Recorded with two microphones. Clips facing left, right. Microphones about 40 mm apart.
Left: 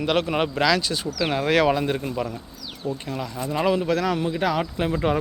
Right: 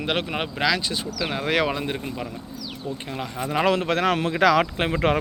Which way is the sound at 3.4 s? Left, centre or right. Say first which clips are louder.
Right 1 dB; right.